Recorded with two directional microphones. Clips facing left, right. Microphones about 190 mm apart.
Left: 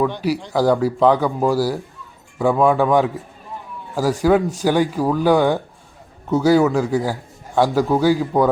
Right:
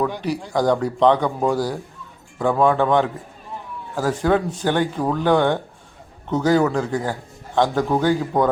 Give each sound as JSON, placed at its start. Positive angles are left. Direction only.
{"t": 0.5, "sound": "a man's voice", "side_deg": 5}